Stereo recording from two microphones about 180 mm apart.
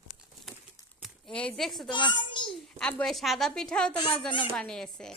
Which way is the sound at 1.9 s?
25° left (ahead or behind).